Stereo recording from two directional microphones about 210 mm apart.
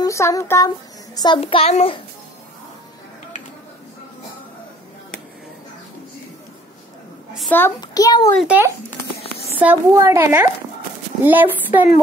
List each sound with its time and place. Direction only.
0.0 s child singing: 15° left (ahead or behind)
1.1 s a child's voice: 20° left (ahead or behind)
7.3 s a sound: 5° left (ahead or behind)
7.8 s a child's voice: 20° left (ahead or behind)
8.4 s a child's voice: 5° right (ahead or behind)